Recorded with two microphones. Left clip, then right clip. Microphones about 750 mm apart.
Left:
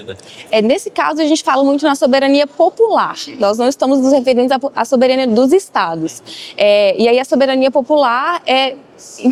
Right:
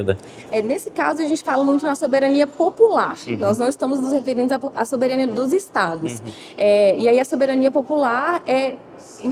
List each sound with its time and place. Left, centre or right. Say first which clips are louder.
0.5 s speech: left 8 dB; left